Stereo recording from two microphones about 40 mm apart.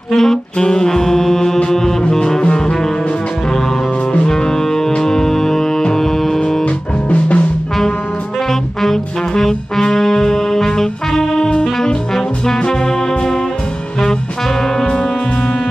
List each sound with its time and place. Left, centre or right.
0.1 s saxophone: centre
2.4 s music: left
4.3 s music: centre
6.6 s music: left
8.5 s trombone: centre
12.4 s music: centre